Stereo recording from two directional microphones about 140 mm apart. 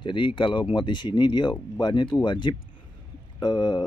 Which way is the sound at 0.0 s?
35° left (ahead or behind).